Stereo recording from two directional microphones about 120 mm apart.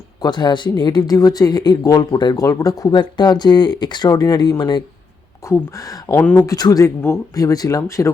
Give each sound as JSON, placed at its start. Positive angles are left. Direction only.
{"t": 0.2, "sound": "speech", "side_deg": 35}